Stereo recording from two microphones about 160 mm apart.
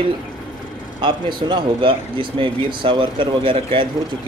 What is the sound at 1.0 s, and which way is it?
Speech, 30° right (ahead or behind).